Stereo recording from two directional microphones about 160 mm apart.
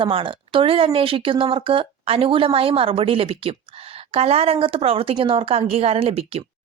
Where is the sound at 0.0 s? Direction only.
35° right (ahead or behind).